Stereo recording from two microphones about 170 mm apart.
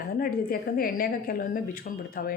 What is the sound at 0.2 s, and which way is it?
A woman's voice, 60° left (ahead or behind).